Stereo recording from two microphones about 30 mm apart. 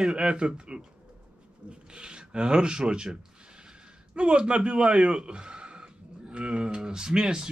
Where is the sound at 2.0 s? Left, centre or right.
Right.